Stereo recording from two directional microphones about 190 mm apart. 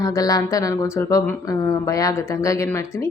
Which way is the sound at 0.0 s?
20° left (ahead or behind).